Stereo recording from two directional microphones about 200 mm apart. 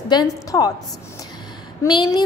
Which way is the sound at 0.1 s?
20° left (ahead or behind).